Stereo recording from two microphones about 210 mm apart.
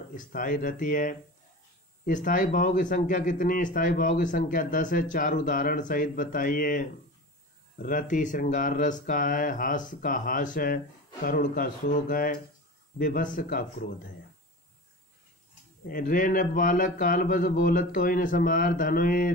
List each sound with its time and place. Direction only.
0.1 s speech: 40° left (ahead or behind)
15.9 s speech: 40° left (ahead or behind)